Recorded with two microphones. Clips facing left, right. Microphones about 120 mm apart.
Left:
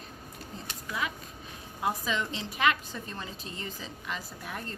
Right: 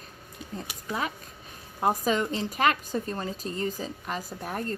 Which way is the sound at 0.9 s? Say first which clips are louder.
Right 3 dB; 40° right (ahead or behind).